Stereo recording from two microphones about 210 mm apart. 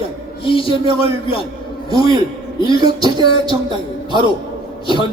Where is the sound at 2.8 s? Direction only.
20° right (ahead or behind).